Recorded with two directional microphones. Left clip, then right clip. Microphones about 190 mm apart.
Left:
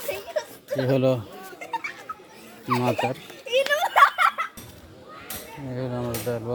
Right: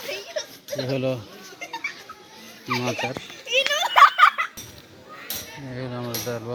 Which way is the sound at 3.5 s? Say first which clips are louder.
Even; 40° left (ahead or behind).